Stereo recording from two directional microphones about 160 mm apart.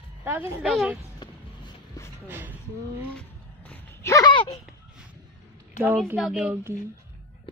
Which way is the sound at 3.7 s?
15° left (ahead or behind).